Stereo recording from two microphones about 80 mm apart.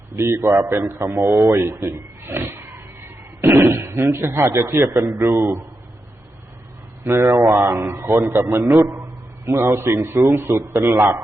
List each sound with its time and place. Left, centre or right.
0.2 s a man's voice: right
2.3 s a sound: right
3.4 s a man's voice: right
7.0 s a man's voice: right